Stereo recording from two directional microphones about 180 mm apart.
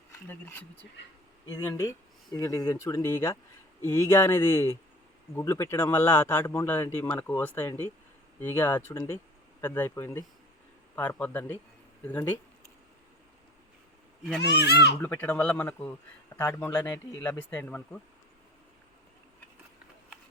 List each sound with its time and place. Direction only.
0.3 s a man's voice: 10° left (ahead or behind)
14.4 s speech: 70° left (ahead or behind)
14.9 s a man's voice: 10° left (ahead or behind)